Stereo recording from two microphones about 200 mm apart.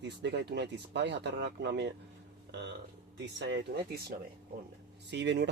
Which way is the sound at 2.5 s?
60° right (ahead or behind).